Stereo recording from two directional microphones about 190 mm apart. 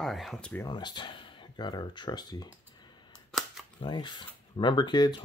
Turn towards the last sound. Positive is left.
turn(degrees=20)  # may be behind; listen again after turning